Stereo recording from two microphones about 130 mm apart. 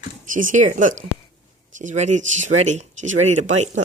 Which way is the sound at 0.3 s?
85° right.